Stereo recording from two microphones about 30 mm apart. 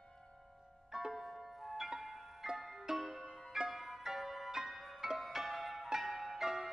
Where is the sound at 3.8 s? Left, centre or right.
Centre.